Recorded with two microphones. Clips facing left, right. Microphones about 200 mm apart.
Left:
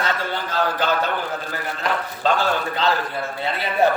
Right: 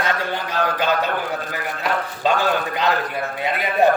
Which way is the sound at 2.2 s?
15° right (ahead or behind).